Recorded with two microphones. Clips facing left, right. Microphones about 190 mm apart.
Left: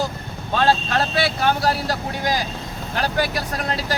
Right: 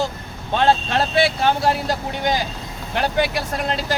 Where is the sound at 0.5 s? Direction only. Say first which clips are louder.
Right 1 dB; 25° right (ahead or behind).